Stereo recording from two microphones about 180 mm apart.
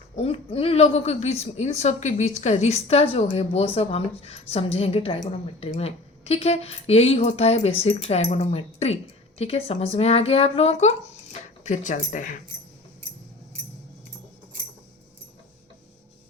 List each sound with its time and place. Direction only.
0.2 s a woman's voice: 30° left (ahead or behind)